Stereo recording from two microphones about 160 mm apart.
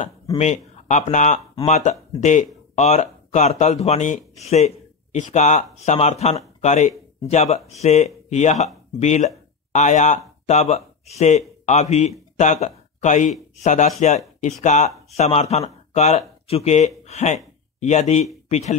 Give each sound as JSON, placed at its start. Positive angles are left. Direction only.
{"t": 0.4, "sound": "speech", "side_deg": 45}